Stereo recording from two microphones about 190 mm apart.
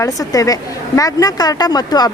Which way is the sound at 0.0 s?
20° left (ahead or behind).